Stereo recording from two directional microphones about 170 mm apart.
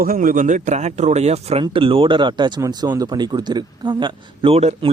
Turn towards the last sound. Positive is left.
turn(degrees=-35)  # may be behind; listen again after turning